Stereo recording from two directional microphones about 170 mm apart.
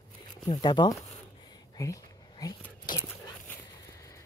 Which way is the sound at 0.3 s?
25° left (ahead or behind).